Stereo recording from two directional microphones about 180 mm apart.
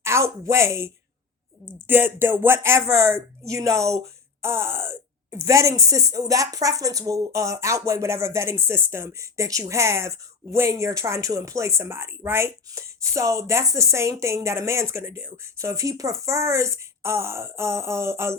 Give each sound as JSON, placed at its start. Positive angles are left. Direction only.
{"t": 0.0, "sound": "speech", "side_deg": -15}
{"t": 1.9, "sound": "speech", "side_deg": -10}